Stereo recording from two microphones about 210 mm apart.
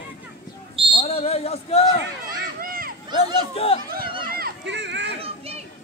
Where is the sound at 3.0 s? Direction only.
20° right (ahead or behind).